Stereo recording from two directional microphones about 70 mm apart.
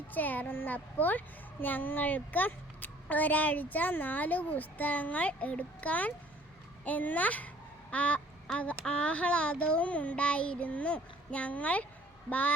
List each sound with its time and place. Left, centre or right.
0.1 s a child's voice: left